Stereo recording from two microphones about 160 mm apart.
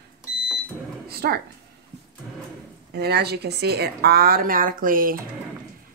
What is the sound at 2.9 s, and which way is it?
A woman's voice, 90° right.